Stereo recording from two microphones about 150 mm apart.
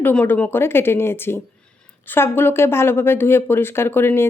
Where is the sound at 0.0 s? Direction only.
10° left (ahead or behind).